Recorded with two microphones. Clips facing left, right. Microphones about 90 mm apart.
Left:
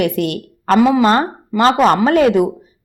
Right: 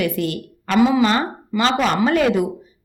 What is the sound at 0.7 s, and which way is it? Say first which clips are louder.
A woman's voice: left 4 dB; 45° left (ahead or behind).